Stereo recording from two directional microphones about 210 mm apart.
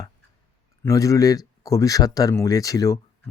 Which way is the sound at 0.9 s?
15° left (ahead or behind).